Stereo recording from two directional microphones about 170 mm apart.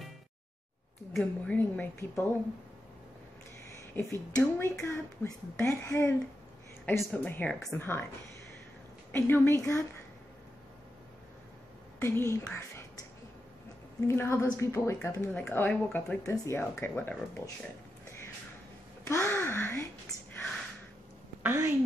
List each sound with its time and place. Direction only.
1.1 s a woman's voice: 5° left (ahead or behind)
3.7 s a woman's voice: 15° left (ahead or behind)
9.1 s a woman's voice: 15° left (ahead or behind)
12.0 s a woman's voice: 15° left (ahead or behind)
14.0 s a woman's voice: 15° left (ahead or behind)
19.0 s speech: 15° left (ahead or behind)
20.1 s a sound: 20° left (ahead or behind)
21.4 s a sound: 15° right (ahead or behind)